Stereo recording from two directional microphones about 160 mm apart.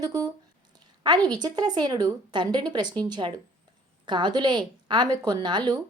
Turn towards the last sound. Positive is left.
turn(degrees=-25)  # may be behind; listen again after turning